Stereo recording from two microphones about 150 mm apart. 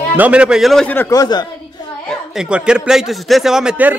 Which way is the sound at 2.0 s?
5° right (ahead or behind).